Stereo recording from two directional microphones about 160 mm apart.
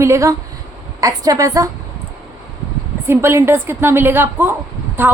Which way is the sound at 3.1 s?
15° right (ahead or behind).